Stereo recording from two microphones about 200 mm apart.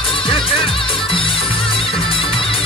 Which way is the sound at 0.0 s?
25° left (ahead or behind).